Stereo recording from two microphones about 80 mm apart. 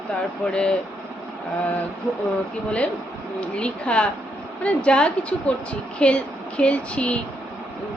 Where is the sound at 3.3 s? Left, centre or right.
Centre.